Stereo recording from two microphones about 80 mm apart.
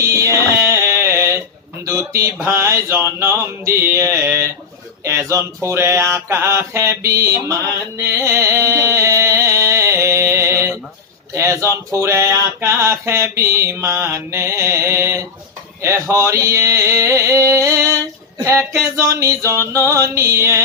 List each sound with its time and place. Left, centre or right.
0.1 s music: right
1.8 s mantra: right
8.2 s a sound: right
11.3 s mantra: right